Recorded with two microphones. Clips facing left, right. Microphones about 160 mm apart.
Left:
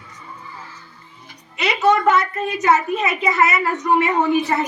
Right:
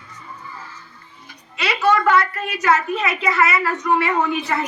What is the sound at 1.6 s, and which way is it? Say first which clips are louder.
A woman's voice: left 1 dB; 20° left (ahead or behind).